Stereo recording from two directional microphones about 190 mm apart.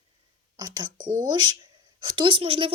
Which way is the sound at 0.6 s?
20° right (ahead or behind).